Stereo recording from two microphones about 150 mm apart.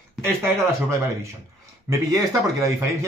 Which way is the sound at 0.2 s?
20° right (ahead or behind).